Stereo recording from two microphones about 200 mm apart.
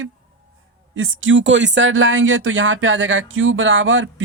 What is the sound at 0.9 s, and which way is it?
Speech, 75° right (ahead or behind).